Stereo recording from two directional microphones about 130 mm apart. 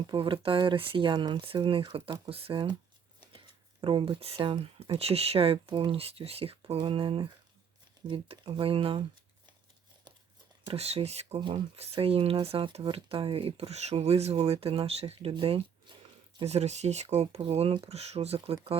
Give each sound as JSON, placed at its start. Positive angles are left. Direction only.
{"t": 0.1, "sound": "speech", "side_deg": -40}
{"t": 10.7, "sound": "speech", "side_deg": -55}
{"t": 11.3, "sound": "speech", "side_deg": -40}
{"t": 16.4, "sound": "speech", "side_deg": -55}
{"t": 17.3, "sound": "speech", "side_deg": -45}